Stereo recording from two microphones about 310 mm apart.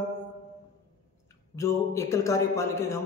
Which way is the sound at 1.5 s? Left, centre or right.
Centre.